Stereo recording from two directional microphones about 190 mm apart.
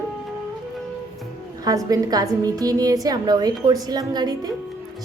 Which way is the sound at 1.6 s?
20° right (ahead or behind).